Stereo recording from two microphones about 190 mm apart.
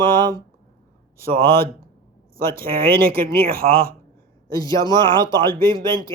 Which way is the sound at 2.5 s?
50° right (ahead or behind).